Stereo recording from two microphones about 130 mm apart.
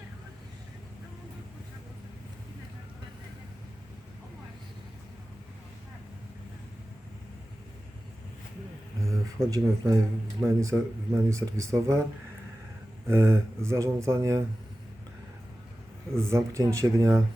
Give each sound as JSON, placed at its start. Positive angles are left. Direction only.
{"t": 9.0, "sound": "a sound", "side_deg": -25}
{"t": 10.4, "sound": "speech", "side_deg": -20}
{"t": 13.1, "sound": "speech", "side_deg": -20}
{"t": 16.1, "sound": "speech", "side_deg": -20}